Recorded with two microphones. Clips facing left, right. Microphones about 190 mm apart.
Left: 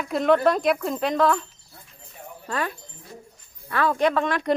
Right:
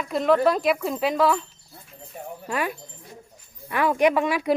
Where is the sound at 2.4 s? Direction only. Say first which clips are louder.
Right 1 dB; 10° right (ahead or behind).